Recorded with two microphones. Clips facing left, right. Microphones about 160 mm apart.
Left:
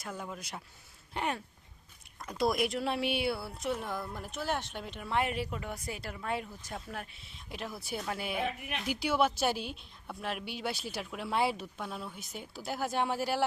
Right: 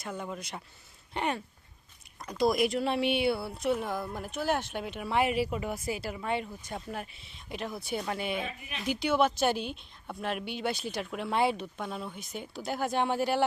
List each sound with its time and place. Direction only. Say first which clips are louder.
0.0 s a woman's voice: right 3 dB; centre (ahead or behind)
8.4 s speech: left 3 dB; 65° left (ahead or behind)
8.9 s a woman's voice: right 3 dB; 10° left (ahead or behind)